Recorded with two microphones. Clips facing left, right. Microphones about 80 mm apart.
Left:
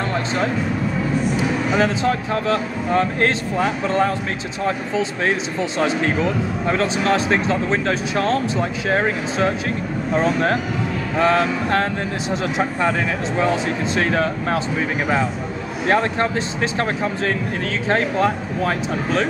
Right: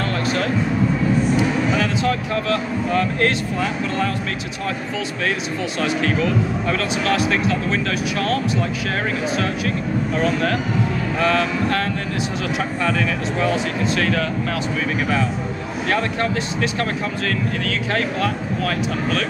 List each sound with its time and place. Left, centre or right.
1.8 s speech: left
15.9 s speech: left
17.6 s speech: left